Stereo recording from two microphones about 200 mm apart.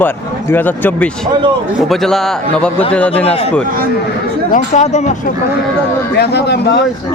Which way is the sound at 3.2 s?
30° left (ahead or behind).